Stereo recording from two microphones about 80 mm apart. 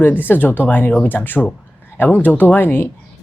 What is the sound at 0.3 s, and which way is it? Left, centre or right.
Speech, left.